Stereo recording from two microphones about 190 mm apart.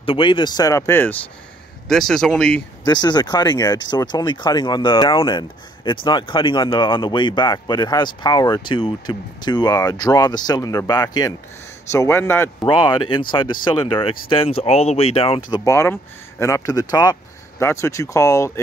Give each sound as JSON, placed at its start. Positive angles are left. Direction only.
{"t": 0.0, "sound": "speech", "side_deg": 25}
{"t": 2.8, "sound": "a man's voice", "side_deg": 20}
{"t": 12.6, "sound": "speech", "side_deg": 25}